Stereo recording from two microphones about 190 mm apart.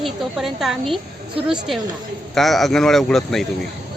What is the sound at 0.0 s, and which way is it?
A woman's voice, centre (ahead or behind).